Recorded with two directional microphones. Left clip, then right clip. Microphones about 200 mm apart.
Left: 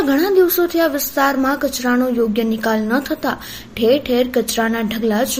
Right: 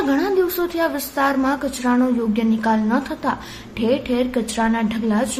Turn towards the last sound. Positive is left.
turn(degrees=15)  # may be behind; listen again after turning